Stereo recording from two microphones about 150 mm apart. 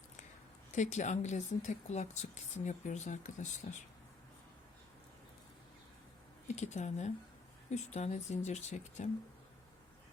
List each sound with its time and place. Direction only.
0.7 s a woman's voice: 50° left (ahead or behind)
6.6 s a woman's voice: 50° left (ahead or behind)